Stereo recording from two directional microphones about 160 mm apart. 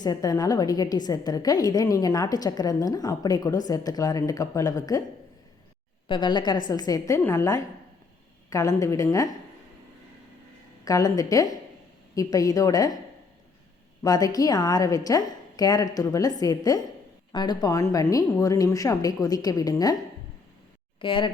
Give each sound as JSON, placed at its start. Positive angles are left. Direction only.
{"t": 0.0, "sound": "a woman's voice", "side_deg": 25}
{"t": 6.1, "sound": "a woman's voice", "side_deg": 30}
{"t": 10.8, "sound": "a woman's voice", "side_deg": 20}
{"t": 14.0, "sound": "a woman's voice", "side_deg": 25}
{"t": 21.0, "sound": "speech", "side_deg": 30}